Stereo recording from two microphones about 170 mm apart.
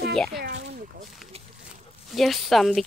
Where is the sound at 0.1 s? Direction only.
5° left (ahead or behind).